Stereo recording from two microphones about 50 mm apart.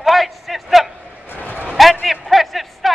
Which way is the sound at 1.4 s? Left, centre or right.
Left.